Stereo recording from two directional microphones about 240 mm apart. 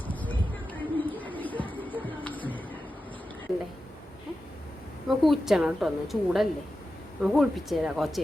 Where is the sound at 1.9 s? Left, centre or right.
Centre.